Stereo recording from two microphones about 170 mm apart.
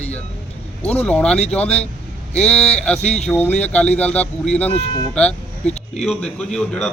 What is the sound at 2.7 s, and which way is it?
Speech, 5° left (ahead or behind).